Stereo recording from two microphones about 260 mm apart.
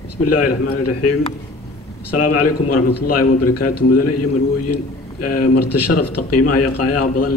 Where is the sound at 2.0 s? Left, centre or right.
Left.